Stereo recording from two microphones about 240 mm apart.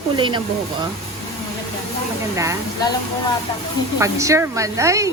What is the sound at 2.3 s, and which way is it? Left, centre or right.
Speech, centre.